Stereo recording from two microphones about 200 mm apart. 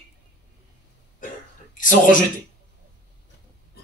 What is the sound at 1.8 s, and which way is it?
Speech, 40° left (ahead or behind).